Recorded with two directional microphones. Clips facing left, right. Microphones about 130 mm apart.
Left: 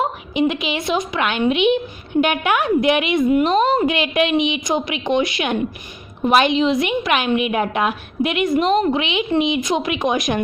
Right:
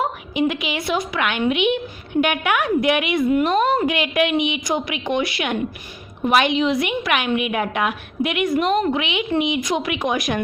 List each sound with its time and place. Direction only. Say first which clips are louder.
0.0 s a woman's voice: left 2 dB; 25° left (ahead or behind)